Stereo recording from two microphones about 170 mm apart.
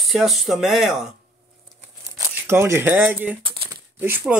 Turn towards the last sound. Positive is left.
turn(degrees=-10)  # may be behind; listen again after turning